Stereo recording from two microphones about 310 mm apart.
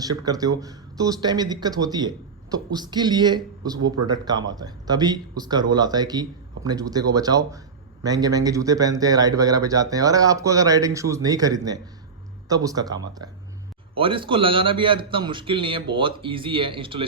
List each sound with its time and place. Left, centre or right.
0.0 s speech: centre